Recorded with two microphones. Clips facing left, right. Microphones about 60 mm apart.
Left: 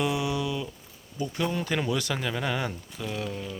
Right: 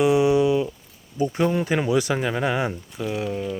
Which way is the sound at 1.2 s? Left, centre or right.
Right.